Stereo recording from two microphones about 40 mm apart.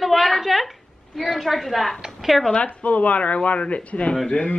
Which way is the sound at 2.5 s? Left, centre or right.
Left.